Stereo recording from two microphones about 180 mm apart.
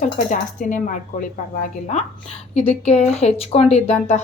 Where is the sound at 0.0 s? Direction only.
45° left (ahead or behind).